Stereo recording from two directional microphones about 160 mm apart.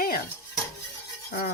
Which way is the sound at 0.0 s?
70° left (ahead or behind).